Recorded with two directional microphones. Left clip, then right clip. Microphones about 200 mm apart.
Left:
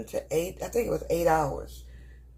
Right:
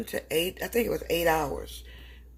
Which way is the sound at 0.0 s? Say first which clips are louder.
Even; 50° right (ahead or behind).